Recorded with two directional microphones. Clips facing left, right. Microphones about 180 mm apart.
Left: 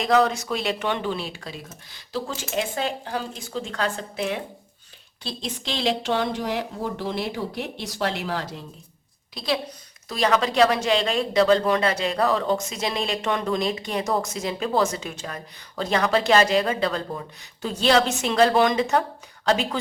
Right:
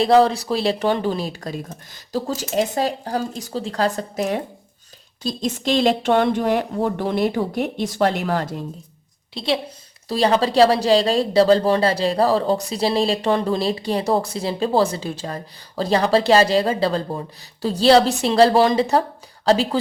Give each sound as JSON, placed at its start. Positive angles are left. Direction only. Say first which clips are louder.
{"t": 0.0, "sound": "speech", "louder": "right 5 dB", "side_deg": -30}
{"t": 9.3, "sound": "a woman's voice", "louder": "right 4 dB", "side_deg": -25}